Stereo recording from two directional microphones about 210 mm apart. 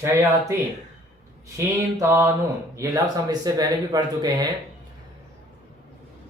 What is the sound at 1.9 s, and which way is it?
Speech, 15° right (ahead or behind).